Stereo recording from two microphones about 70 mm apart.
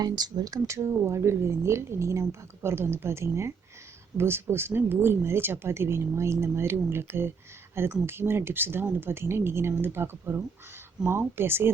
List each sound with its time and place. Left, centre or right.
0.0 s speech: right
0.7 s speech: right